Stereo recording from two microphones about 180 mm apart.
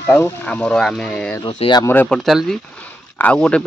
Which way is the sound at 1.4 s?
30° left (ahead or behind).